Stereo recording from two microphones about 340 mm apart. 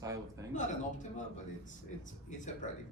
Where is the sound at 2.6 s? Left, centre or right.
Left.